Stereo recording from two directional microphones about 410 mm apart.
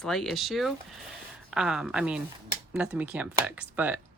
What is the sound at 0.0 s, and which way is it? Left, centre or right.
Speech, centre.